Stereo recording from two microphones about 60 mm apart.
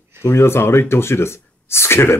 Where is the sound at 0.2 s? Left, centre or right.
Left.